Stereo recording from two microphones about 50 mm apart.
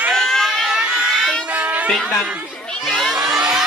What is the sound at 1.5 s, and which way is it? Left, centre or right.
Music, right.